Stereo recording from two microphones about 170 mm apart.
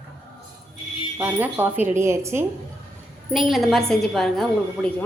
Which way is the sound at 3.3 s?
Centre (ahead or behind).